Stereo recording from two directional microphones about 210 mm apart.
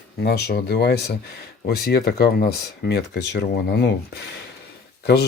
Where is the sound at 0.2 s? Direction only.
50° left (ahead or behind).